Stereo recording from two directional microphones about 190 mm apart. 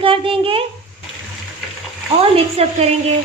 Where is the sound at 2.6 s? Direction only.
35° right (ahead or behind).